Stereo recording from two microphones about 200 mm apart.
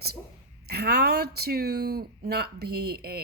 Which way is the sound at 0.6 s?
55° right (ahead or behind).